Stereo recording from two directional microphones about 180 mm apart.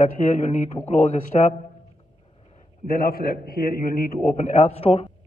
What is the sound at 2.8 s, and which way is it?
A man's voice, 55° left (ahead or behind).